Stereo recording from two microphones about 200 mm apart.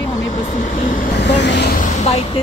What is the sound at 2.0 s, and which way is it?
Speech, 30° left (ahead or behind).